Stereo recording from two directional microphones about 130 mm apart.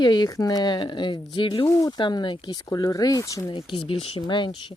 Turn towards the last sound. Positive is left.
turn(degrees=40)  # may be behind; listen again after turning